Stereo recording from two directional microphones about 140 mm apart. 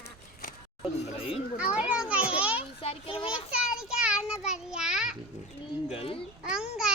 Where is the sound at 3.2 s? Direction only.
5° right (ahead or behind).